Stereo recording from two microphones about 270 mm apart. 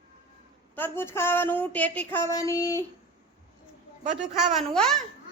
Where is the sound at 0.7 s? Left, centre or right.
Centre.